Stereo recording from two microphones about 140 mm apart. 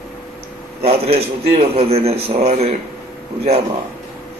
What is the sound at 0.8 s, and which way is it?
A man's voice, 45° right (ahead or behind).